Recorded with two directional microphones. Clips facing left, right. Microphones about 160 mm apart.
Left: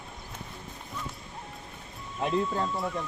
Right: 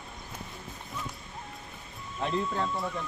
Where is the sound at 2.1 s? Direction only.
5° left (ahead or behind).